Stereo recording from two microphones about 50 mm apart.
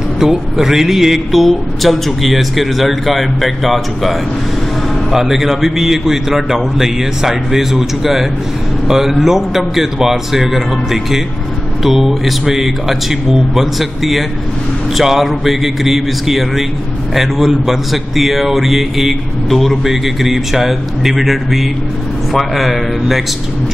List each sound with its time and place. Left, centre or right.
0.2 s a man's voice: centre